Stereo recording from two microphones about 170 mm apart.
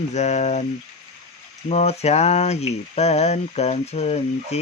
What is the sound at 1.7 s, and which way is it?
Speech, 40° left (ahead or behind).